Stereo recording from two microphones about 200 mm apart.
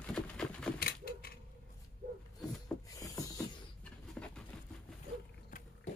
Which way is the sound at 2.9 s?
15° left (ahead or behind).